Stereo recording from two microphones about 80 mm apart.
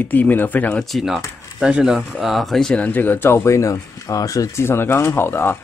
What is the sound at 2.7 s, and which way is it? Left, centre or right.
Speech, centre.